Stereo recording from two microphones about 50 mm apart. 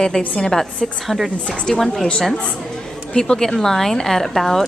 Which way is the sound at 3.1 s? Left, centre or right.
Centre.